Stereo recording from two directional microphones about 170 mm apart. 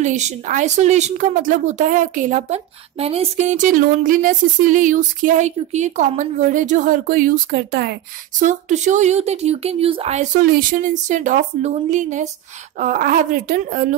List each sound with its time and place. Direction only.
0.0 s speech: 45° right (ahead or behind); by 8.0 s 70° right (ahead or behind)
8.4 s speech: 45° right (ahead or behind)